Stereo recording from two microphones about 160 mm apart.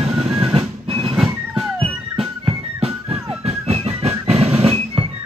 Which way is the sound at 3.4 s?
40° right (ahead or behind).